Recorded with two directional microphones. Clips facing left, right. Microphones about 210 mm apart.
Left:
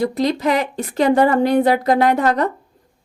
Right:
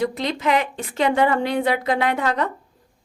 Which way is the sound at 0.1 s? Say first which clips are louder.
Left 4 dB; 40° left (ahead or behind).